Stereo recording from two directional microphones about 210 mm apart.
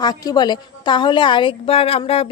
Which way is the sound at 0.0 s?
20° left (ahead or behind).